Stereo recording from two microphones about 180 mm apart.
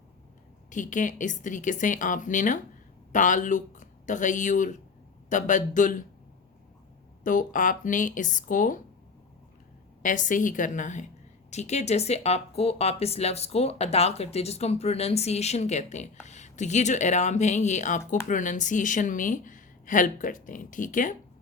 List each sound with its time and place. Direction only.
0.7 s speech: 45° left (ahead or behind)
7.3 s speech: 45° left (ahead or behind)
10.0 s speech: 45° left (ahead or behind)